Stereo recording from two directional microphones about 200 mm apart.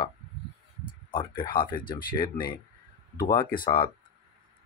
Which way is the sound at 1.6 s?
45° left (ahead or behind).